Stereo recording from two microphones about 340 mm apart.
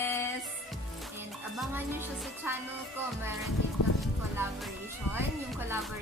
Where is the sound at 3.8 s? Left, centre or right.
Left.